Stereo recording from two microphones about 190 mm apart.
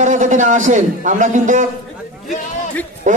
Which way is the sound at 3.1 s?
40° right (ahead or behind).